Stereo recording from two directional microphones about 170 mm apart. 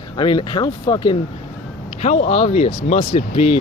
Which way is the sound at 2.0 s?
40° left (ahead or behind).